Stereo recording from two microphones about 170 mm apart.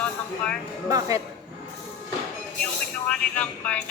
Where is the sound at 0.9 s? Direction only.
20° right (ahead or behind).